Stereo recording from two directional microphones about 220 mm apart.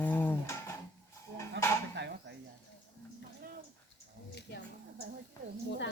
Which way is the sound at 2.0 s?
55° right (ahead or behind).